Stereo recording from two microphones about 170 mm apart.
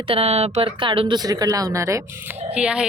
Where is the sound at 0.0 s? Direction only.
35° right (ahead or behind).